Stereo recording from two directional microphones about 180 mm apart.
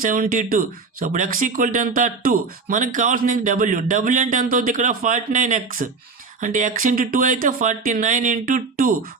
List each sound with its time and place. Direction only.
0.0 s speech: 50° right (ahead or behind)